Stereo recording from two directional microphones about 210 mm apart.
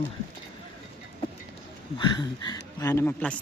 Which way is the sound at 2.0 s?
20° left (ahead or behind).